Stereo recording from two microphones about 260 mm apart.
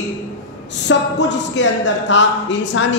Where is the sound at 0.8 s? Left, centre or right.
Left.